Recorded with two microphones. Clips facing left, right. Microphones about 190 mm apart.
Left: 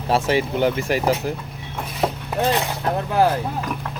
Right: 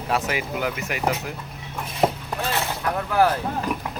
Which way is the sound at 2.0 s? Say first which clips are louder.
Right 2 dB; 5° right (ahead or behind).